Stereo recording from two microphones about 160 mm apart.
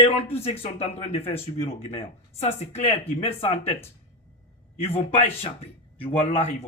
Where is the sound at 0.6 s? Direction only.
40° left (ahead or behind).